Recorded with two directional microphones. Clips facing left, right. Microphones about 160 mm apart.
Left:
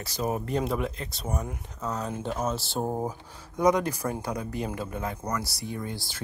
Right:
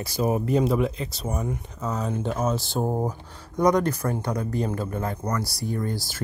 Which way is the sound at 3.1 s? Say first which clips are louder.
Right 3 dB; 5° left (ahead or behind).